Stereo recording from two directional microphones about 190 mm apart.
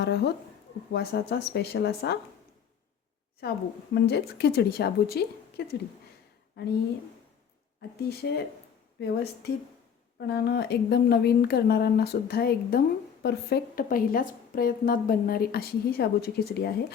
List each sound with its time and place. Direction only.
0.0 s a woman's voice: 60° left (ahead or behind)
3.4 s a woman's voice: 60° left (ahead or behind)
7.8 s a woman's voice: 55° left (ahead or behind)